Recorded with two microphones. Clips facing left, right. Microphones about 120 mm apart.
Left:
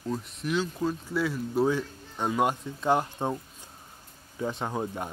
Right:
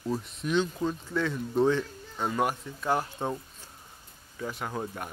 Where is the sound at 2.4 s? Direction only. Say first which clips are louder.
Left 3 dB; 20° left (ahead or behind).